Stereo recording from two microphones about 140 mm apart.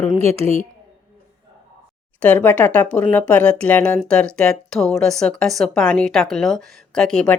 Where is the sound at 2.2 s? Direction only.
10° left (ahead or behind).